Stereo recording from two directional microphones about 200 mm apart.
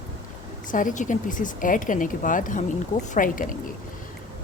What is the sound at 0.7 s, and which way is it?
A woman's voice, 40° left (ahead or behind).